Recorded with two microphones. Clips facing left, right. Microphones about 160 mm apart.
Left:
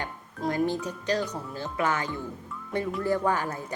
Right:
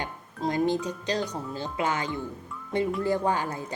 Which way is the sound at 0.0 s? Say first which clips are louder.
Right 1 dB; 20° right (ahead or behind).